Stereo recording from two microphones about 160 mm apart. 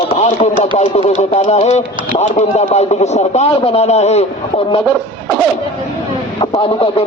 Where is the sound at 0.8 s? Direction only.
40° left (ahead or behind).